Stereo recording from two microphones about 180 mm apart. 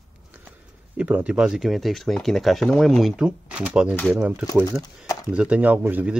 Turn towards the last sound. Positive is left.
turn(degrees=-10)  # may be behind; listen again after turning